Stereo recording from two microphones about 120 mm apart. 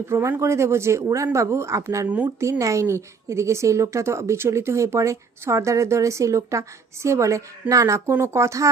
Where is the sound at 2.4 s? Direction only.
25° right (ahead or behind).